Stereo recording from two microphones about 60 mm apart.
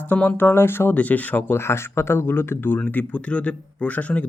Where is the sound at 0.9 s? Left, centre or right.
Left.